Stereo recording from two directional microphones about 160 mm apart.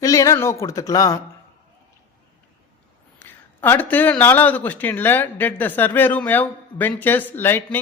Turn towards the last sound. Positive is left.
turn(degrees=15)  # may be behind; listen again after turning